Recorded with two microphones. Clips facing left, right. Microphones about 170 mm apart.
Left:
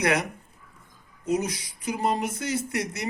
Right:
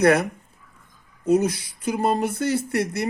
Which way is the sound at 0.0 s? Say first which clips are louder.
Right 7 dB; 60° right (ahead or behind).